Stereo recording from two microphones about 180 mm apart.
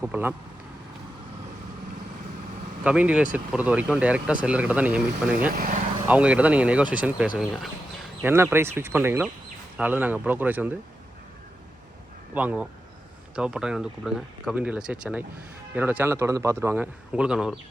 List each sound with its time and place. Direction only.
0.0 s a man's voice: 10° right (ahead or behind)
2.8 s a man's voice: 5° right (ahead or behind)
5.5 s speech: 50° right (ahead or behind)
6.1 s a man's voice: 5° right (ahead or behind)
8.2 s a man's voice: 10° right (ahead or behind)
12.3 s a man's voice: 10° right (ahead or behind)